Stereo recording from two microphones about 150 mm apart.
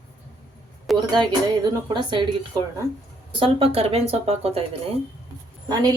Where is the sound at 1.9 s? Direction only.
30° right (ahead or behind).